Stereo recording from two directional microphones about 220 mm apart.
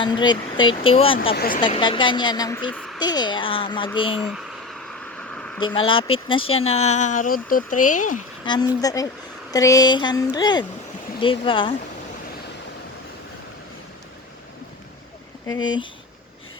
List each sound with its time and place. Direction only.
0.0 s speech: 20° left (ahead or behind)
1.4 s speech: 40° left (ahead or behind)
1.6 s speech: 20° left (ahead or behind)
2.7 s a sound: centre (ahead or behind)
3.0 s speech: 20° left (ahead or behind)
4.3 s a sound: centre (ahead or behind)
5.8 s speech: 25° left (ahead or behind)
8.4 s speech: 20° left (ahead or behind)
15.4 s speech: 20° left (ahead or behind)